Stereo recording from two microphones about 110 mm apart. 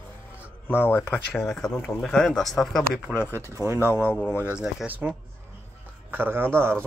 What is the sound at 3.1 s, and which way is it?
Speech, 15° left (ahead or behind).